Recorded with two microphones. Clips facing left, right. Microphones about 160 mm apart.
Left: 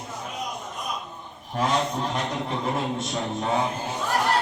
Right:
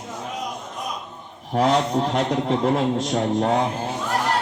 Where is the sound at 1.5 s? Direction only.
80° right.